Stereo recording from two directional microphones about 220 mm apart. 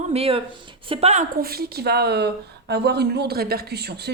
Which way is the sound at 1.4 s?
45° right (ahead or behind).